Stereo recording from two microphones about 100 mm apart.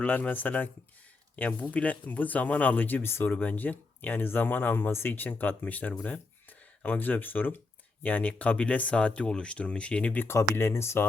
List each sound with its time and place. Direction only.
0.0 s speech: 15° left (ahead or behind)
10.2 s speech: 25° left (ahead or behind)